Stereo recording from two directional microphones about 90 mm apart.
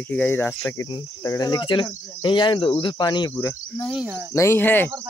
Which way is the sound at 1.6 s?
65° left (ahead or behind).